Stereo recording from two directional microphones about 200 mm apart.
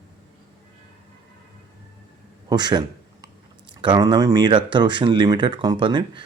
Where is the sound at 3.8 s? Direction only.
20° right (ahead or behind).